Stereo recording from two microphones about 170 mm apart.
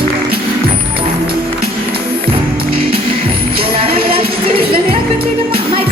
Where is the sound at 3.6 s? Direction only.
35° right (ahead or behind).